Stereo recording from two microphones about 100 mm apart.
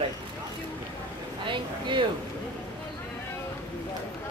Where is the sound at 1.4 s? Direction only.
55° right (ahead or behind).